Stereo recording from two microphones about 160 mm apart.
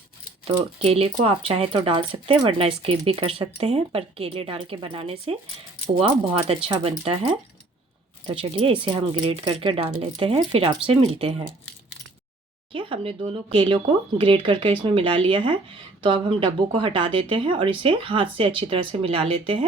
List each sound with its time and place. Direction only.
0.4 s speech: 35° right (ahead or behind)
12.7 s speech: 35° right (ahead or behind)